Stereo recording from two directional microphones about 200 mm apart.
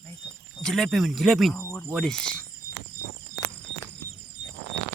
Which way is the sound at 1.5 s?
15° left (ahead or behind).